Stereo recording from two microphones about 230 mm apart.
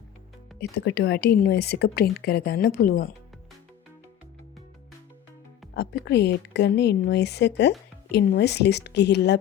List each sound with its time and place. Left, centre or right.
0.6 s a woman's voice: left
5.7 s a woman's voice: left